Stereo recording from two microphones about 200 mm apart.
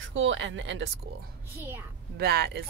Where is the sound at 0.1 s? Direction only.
70° right (ahead or behind).